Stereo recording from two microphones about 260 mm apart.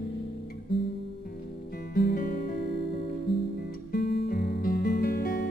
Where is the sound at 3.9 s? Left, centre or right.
Left.